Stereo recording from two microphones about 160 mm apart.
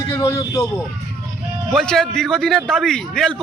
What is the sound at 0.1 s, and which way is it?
Speech, 20° left (ahead or behind).